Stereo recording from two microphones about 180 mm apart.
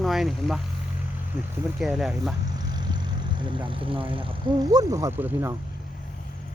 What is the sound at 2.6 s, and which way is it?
Speech, 25° right (ahead or behind).